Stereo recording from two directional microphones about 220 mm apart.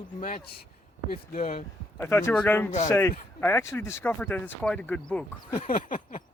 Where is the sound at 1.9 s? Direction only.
10° left (ahead or behind).